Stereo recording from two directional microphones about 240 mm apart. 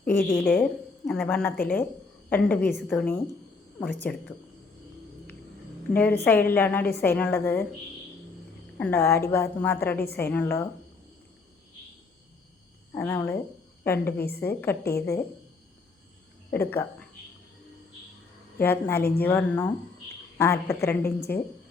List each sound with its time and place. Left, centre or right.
0.0 s a woman's voice: centre
5.9 s a woman's voice: centre
8.8 s a woman's voice: centre
12.9 s a woman's voice: centre
14.2 s a woman's voice: left
14.4 s a woman's voice: centre
14.8 s a woman's voice: left
16.5 s a woman's voice: centre
18.6 s a woman's voice: centre